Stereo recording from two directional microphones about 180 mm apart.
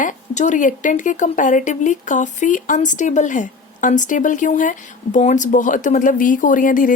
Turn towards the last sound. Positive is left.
turn(degrees=50)  # may be behind; listen again after turning